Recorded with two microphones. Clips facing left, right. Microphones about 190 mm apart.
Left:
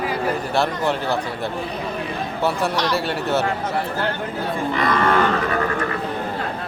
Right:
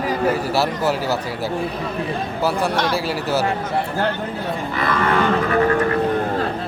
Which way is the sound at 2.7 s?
55° right (ahead or behind).